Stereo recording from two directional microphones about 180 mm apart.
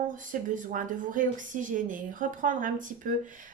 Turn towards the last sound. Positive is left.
turn(degrees=-45)  # may be behind; listen again after turning